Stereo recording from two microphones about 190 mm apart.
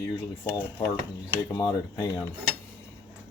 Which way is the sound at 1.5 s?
20° left (ahead or behind).